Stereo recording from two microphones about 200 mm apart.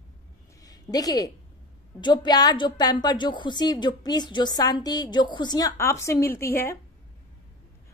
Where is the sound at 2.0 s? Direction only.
20° left (ahead or behind).